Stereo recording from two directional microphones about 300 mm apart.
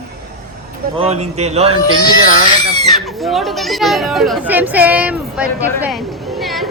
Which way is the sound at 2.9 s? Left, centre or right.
Centre.